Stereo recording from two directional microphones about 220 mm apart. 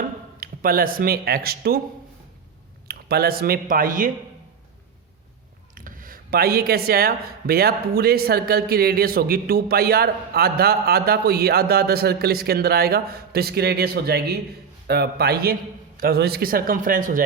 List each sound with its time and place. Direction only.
0.3 s speech: 40° right (ahead or behind)
2.8 s speech: 45° right (ahead or behind)
5.7 s speech: 40° right (ahead or behind)